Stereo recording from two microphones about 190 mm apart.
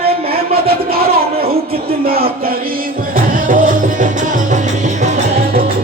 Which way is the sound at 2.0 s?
50° right (ahead or behind).